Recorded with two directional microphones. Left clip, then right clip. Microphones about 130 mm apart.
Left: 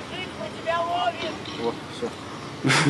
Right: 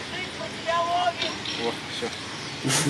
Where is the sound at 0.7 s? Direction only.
15° left (ahead or behind).